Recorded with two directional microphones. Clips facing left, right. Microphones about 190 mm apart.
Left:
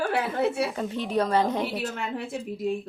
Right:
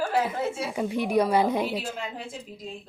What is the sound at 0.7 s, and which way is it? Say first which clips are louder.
A woman's voice: right 3 dB; 10° right (ahead or behind).